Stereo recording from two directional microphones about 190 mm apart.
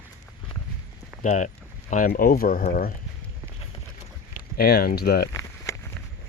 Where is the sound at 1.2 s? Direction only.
40° left (ahead or behind).